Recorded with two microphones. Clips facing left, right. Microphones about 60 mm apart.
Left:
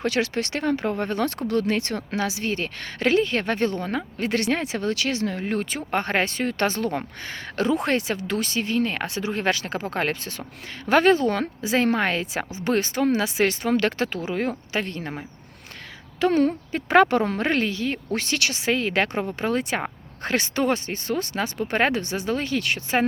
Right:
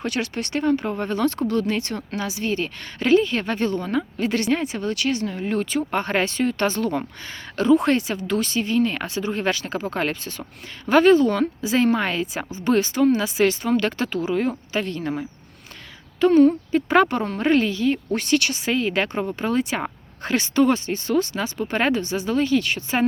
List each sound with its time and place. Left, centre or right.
0.0 s speech: left
3.8 s speech: left
4.2 s speech: left
5.4 s speech: left
16.2 s speech: left
16.7 s speech: left
17.1 s speech: left